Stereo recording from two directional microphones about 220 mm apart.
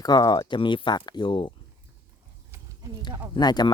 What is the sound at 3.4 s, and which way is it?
Speech, 20° left (ahead or behind).